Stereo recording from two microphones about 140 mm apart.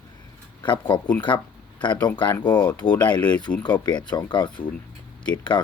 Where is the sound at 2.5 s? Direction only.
30° left (ahead or behind).